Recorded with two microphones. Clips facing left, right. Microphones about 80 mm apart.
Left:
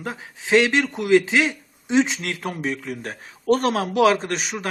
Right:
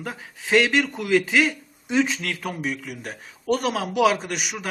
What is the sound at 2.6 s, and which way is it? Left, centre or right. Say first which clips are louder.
A man's voice: left 2 dB; left.